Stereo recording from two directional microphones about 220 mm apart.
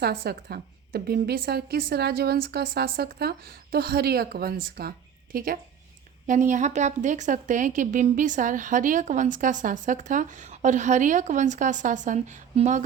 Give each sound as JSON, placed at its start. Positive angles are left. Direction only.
{"t": 0.3, "sound": "a woman's voice", "side_deg": -45}